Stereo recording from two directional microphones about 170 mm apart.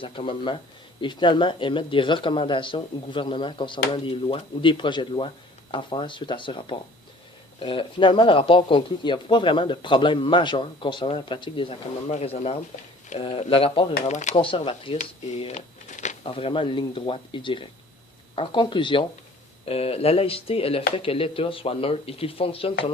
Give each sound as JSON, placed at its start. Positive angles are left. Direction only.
{"t": 0.0, "sound": "speech", "side_deg": 30}
{"t": 14.0, "sound": "speech", "side_deg": 45}
{"t": 14.3, "sound": "speech", "side_deg": 30}
{"t": 16.2, "sound": "speech", "side_deg": 35}